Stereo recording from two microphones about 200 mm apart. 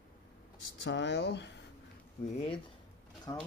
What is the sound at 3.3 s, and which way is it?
Speech, 20° left (ahead or behind).